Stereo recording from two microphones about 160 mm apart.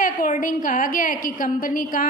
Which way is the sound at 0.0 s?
55° left (ahead or behind).